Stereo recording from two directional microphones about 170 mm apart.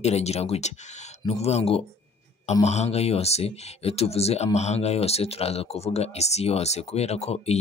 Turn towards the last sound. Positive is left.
turn(degrees=40)  # may be behind; listen again after turning